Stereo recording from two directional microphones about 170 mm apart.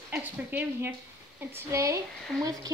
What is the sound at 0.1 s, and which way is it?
Speech, 10° right (ahead or behind).